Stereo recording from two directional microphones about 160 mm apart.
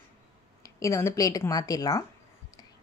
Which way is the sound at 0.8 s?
20° left (ahead or behind).